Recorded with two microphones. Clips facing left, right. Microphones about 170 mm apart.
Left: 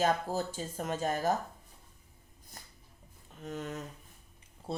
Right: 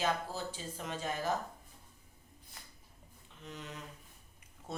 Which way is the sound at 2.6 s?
45° left (ahead or behind).